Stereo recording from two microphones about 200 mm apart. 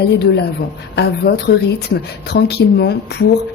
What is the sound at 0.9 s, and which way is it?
Speech, 55° left (ahead or behind).